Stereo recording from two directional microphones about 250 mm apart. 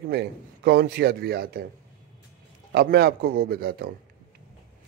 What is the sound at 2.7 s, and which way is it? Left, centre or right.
A man's voice, right.